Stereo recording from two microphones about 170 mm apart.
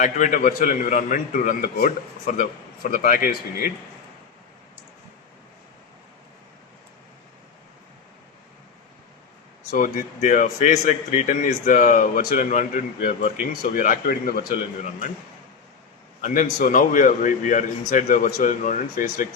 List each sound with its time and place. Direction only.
0.0 s a man's voice: 45° left (ahead or behind)
9.7 s a man's voice: 50° left (ahead or behind)
13.5 s speech: 60° left (ahead or behind)
16.2 s a man's voice: 50° left (ahead or behind)